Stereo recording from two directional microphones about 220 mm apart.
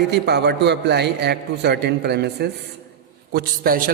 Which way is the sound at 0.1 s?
50° right (ahead or behind).